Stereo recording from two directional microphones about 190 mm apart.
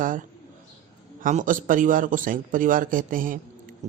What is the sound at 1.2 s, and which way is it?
Speech, 45° right (ahead or behind).